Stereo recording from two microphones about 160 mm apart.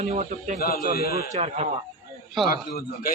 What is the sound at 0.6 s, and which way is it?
Speech, 65° left (ahead or behind).